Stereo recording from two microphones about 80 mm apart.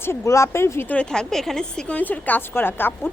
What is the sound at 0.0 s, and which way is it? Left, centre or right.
Speech, left.